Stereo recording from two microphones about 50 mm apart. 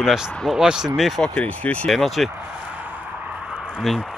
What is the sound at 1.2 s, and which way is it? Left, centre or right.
Speech, left.